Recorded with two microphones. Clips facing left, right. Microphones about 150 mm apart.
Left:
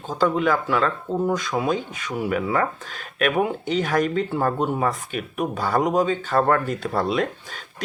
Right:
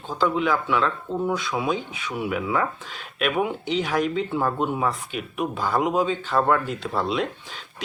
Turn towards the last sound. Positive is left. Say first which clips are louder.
# left 2 dB
turn(degrees=45)  # may be behind; listen again after turning